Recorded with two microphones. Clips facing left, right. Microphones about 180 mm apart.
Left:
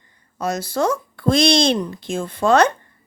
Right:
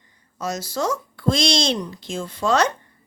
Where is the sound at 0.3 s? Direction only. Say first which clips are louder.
Left 4 dB; 55° left (ahead or behind).